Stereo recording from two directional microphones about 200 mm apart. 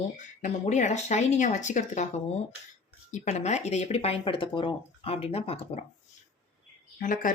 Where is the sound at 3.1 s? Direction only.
35° left (ahead or behind).